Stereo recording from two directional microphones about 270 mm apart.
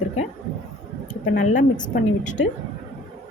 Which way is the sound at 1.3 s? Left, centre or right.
Left.